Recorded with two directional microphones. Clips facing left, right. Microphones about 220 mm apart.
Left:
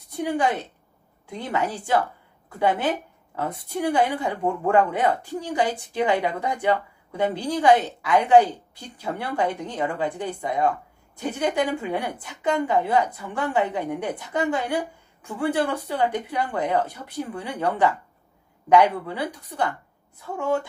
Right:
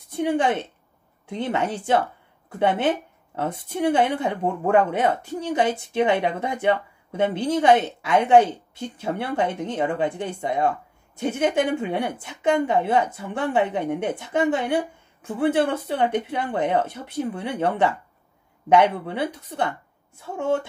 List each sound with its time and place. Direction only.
0.1 s a woman's voice: 25° right (ahead or behind)